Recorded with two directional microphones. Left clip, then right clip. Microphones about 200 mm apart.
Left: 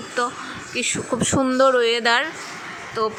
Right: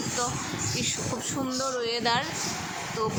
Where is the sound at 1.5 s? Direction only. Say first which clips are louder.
Left 15 dB; 25° left (ahead or behind).